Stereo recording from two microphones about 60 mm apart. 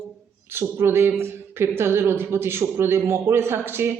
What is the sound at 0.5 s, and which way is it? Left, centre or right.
Speech, right.